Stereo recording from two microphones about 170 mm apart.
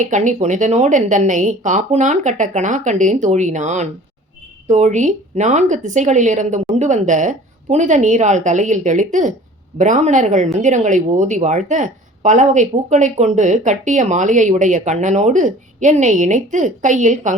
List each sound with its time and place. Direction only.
0.0 s speech: 45° right (ahead or behind)